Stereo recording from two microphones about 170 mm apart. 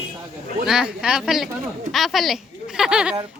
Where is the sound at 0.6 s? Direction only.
5° right (ahead or behind).